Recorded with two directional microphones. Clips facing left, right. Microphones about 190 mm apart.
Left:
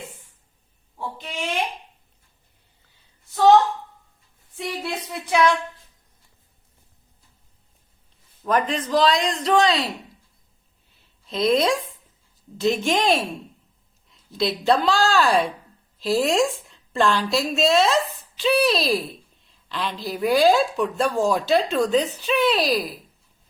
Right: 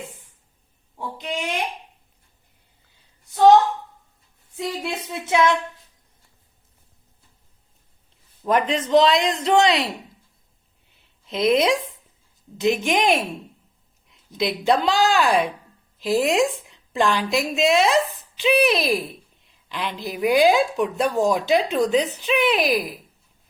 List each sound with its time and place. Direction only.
0.9 s speech: 15° right (ahead or behind)
4.8 s a man's voice: 25° right (ahead or behind)
8.4 s a man's voice: 25° right (ahead or behind)
11.3 s a man's voice: 20° right (ahead or behind)